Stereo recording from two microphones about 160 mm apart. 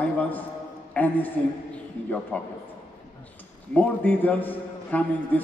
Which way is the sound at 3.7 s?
10° left (ahead or behind).